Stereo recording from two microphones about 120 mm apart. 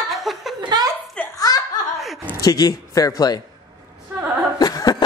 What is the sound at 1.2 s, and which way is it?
Laughter, 10° left (ahead or behind).